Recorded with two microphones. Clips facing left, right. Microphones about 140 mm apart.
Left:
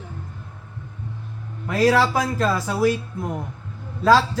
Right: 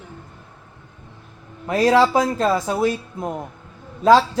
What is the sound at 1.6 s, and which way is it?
Speech, 25° right (ahead or behind).